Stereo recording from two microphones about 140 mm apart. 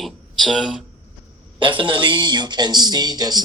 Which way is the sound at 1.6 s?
35° right (ahead or behind).